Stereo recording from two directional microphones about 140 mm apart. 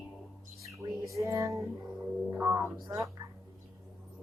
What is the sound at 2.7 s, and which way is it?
Music, 25° right (ahead or behind).